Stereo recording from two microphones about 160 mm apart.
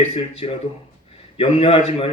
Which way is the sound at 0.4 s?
40° left (ahead or behind).